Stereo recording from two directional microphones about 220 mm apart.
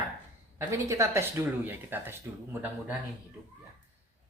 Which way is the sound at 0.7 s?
15° right (ahead or behind).